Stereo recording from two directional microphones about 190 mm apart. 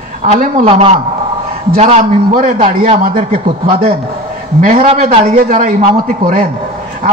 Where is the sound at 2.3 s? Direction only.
45° right (ahead or behind).